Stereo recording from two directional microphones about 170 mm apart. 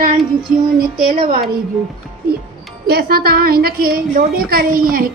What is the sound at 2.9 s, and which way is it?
A woman's voice, 70° right (ahead or behind).